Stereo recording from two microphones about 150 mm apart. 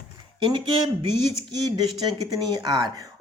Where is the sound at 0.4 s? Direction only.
35° right (ahead or behind).